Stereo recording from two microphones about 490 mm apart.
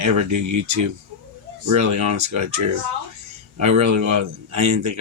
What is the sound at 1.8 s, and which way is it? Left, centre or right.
Speech, right.